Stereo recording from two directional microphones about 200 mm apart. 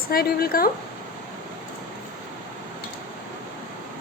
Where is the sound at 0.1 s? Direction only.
50° left (ahead or behind).